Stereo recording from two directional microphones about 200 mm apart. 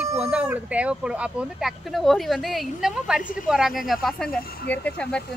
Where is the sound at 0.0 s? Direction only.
5° right (ahead or behind).